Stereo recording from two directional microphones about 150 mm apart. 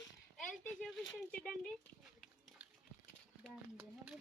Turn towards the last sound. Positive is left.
turn(degrees=-10)  # may be behind; listen again after turning